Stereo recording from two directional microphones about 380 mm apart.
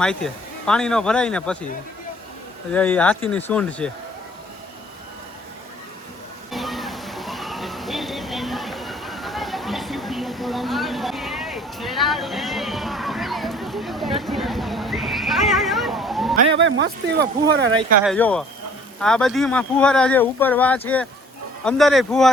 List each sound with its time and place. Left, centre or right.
0.0 s speech: centre
2.7 s speech: centre
6.5 s water: centre
16.6 s speech: right
17.7 s speech: centre
18.0 s speech: centre